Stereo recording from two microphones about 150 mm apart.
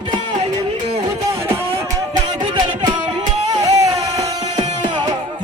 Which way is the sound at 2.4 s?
30° right (ahead or behind).